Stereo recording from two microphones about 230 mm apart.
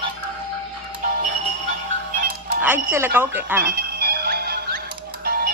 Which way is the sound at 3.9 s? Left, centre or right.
Right.